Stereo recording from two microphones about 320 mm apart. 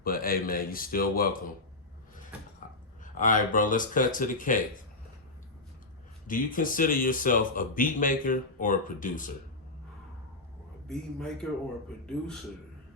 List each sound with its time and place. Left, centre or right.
0.0 s speech: left
3.0 s speech: left
6.2 s speech: left
10.8 s a man's voice: centre